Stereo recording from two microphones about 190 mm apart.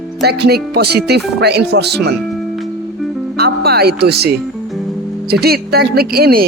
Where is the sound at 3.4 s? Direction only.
55° right (ahead or behind).